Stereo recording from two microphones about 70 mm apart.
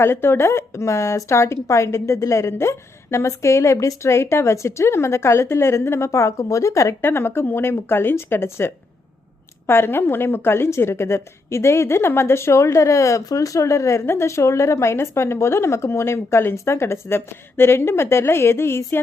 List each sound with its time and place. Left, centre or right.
0.0 s a woman's voice: left
7.0 s a woman's voice: left